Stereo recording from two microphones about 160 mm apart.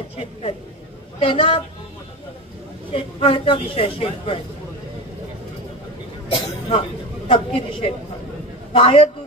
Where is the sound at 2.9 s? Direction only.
35° left (ahead or behind).